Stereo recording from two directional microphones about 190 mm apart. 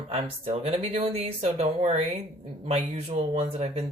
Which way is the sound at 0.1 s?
35° right (ahead or behind).